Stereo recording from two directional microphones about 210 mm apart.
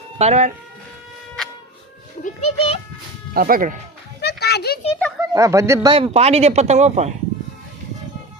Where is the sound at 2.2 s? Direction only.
30° left (ahead or behind).